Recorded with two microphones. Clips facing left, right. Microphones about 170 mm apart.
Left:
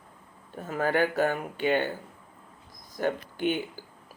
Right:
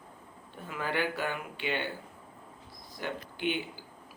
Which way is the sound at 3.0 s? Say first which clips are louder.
Left 7 dB; 45° left (ahead or behind).